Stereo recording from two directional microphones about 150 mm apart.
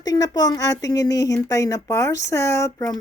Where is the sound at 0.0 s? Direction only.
25° left (ahead or behind).